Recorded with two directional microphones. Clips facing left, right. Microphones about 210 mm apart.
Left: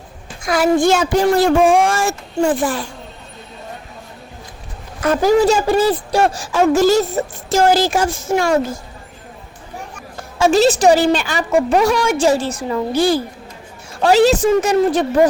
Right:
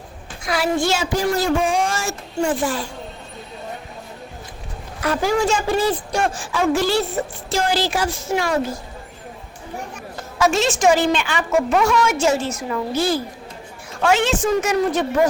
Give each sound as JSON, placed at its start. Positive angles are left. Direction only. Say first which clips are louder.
{"t": 0.4, "sound": "a woman's voice", "louder": "left 6 dB", "side_deg": 45}
{"t": 5.0, "sound": "a woman's voice", "louder": "left 6 dB", "side_deg": 45}
{"t": 10.3, "sound": "a woman's voice", "louder": "left 6 dB", "side_deg": 30}